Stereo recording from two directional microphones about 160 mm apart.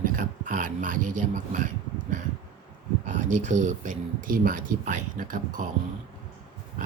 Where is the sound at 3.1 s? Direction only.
50° right (ahead or behind).